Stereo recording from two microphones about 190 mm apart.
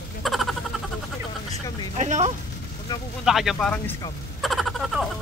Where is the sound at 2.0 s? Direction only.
40° right (ahead or behind).